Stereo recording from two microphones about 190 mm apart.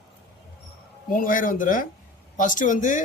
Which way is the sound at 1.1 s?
45° left (ahead or behind).